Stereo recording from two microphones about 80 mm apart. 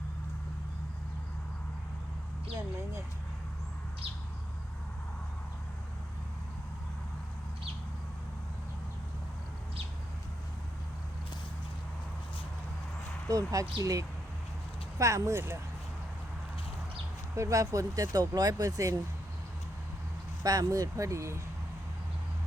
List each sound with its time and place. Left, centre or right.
13.2 s speech: right
17.3 s speech: right
20.4 s speech: right